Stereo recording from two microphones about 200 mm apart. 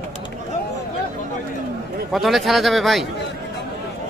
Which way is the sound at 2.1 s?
Centre (ahead or behind).